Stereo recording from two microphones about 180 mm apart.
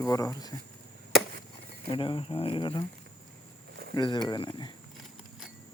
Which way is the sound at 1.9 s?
30° left (ahead or behind).